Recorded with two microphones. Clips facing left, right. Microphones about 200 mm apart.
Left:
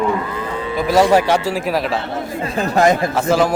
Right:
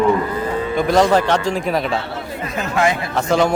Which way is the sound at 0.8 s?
5° left (ahead or behind).